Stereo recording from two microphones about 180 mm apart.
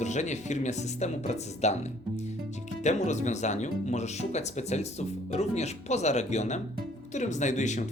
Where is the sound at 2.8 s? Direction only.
40° left (ahead or behind).